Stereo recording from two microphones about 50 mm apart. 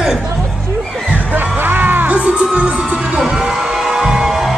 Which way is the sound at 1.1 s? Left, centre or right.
Right.